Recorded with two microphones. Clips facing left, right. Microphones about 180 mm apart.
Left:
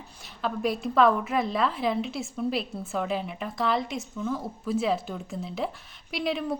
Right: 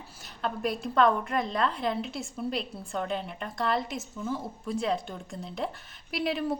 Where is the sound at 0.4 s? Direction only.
Centre (ahead or behind).